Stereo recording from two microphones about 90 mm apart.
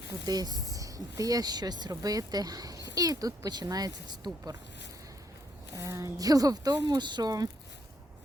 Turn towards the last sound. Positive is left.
turn(degrees=-45)  # may be behind; listen again after turning